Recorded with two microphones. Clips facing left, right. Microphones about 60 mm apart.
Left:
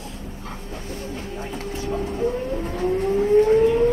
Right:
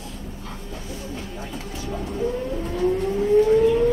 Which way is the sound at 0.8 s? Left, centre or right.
Left.